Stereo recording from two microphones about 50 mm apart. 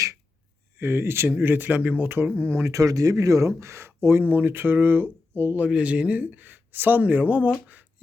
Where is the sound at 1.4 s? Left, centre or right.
Right.